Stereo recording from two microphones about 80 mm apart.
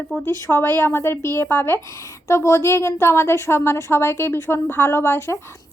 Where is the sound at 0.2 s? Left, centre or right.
Left.